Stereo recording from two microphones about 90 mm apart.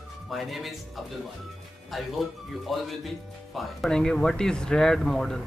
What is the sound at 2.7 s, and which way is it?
Speech, centre (ahead or behind).